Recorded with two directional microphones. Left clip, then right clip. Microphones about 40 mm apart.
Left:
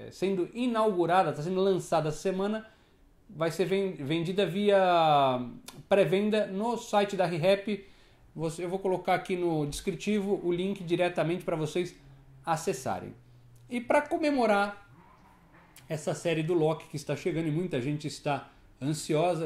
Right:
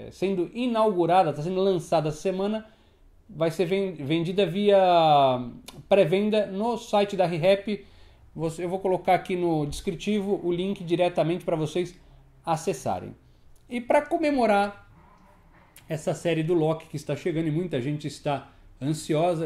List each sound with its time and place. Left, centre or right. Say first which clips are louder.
0.1 s speech: right 3 dB; right
15.9 s speech: right 4 dB; right